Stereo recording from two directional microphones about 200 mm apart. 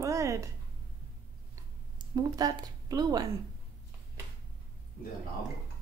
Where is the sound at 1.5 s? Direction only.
20° right (ahead or behind).